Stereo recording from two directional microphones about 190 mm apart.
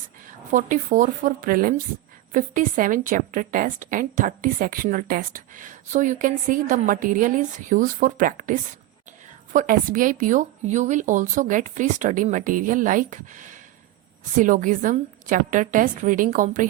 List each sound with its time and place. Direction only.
0.5 s a woman's voice: 45° right (ahead or behind)